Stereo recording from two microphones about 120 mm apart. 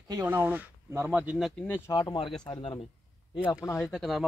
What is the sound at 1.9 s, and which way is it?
Speech, 35° left (ahead or behind).